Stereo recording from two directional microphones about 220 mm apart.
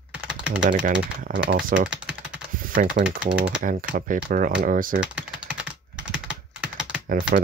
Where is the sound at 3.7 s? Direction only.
40° right (ahead or behind).